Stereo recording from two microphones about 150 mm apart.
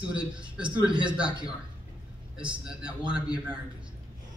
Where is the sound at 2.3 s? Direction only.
5° right (ahead or behind).